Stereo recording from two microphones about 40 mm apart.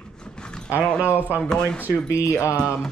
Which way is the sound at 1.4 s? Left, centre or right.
Left.